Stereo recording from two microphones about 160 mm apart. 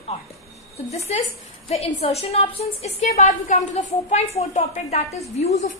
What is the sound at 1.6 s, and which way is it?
A woman's voice, 40° left (ahead or behind).